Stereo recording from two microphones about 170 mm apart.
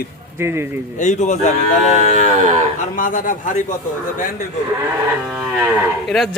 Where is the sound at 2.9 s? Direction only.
50° left (ahead or behind).